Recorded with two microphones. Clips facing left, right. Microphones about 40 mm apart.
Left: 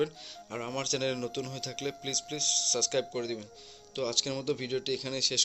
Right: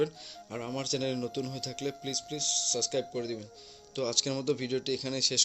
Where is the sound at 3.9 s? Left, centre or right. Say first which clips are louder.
Right 1 dB; left.